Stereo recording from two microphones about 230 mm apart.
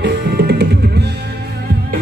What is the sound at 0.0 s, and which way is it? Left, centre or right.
Music, right.